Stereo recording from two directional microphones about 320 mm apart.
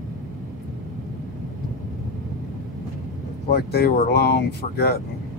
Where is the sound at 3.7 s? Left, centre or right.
Left.